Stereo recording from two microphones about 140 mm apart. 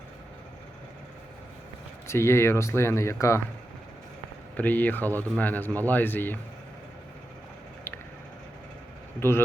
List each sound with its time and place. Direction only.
2.0 s speech: 20° left (ahead or behind)
4.5 s speech: 10° left (ahead or behind)
7.9 s a sound: 15° left (ahead or behind)